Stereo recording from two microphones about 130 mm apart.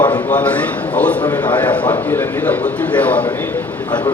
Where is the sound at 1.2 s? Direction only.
35° left (ahead or behind).